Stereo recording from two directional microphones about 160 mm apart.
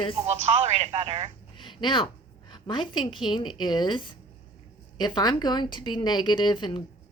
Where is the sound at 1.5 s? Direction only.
30° left (ahead or behind).